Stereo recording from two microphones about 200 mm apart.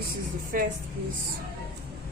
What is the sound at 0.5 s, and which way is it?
Speech, 45° right (ahead or behind).